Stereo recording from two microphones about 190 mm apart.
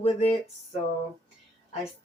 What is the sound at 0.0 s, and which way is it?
Speech, 35° left (ahead or behind).